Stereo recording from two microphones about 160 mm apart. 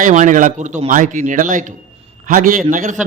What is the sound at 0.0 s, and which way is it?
A man's voice, 55° right (ahead or behind).